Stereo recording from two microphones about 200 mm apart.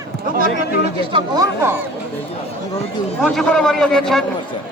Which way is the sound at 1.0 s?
25° right (ahead or behind).